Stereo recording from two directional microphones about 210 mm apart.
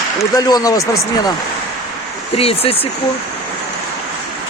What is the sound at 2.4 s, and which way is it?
Speech, 25° left (ahead or behind).